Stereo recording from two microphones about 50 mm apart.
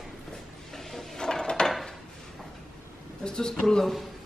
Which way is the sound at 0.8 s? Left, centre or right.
Centre.